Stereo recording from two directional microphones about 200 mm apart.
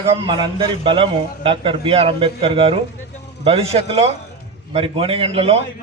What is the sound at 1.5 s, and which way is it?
A man's voice, 25° right (ahead or behind).